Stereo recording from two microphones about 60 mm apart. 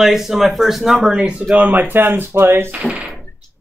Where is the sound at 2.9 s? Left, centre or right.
Centre.